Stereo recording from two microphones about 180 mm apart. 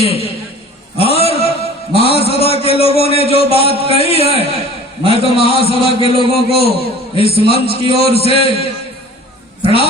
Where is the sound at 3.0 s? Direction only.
35° right (ahead or behind).